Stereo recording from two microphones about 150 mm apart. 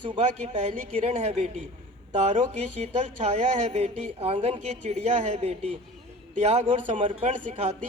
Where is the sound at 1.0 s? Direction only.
45° right (ahead or behind).